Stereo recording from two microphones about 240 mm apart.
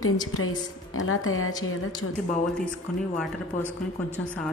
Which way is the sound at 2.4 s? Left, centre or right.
Centre.